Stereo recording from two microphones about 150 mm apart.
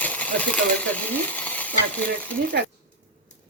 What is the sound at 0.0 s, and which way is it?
Stir, 10° left (ahead or behind).